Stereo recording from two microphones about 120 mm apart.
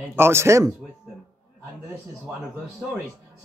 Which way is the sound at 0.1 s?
20° right (ahead or behind).